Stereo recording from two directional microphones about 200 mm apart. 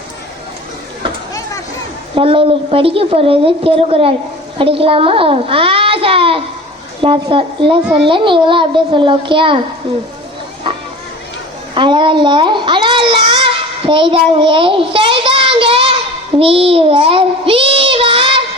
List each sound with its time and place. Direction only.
2.1 s a woman's voice: 25° right (ahead or behind)
11.7 s a child's voice: 25° right (ahead or behind)
16.4 s child singing: 30° right (ahead or behind)